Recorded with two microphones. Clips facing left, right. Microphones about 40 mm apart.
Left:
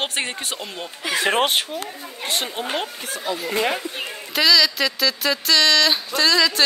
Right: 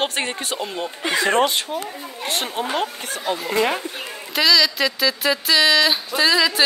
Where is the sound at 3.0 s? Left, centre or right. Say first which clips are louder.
Right 2 dB; right.